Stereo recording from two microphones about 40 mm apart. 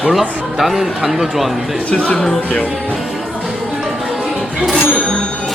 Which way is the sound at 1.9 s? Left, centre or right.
Left.